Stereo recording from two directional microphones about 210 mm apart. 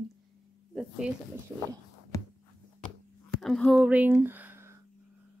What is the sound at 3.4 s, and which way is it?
Speech, centre (ahead or behind).